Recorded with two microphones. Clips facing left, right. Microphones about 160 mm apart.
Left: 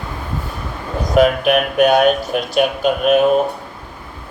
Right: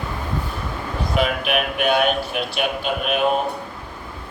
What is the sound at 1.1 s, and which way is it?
Speech, 45° left (ahead or behind).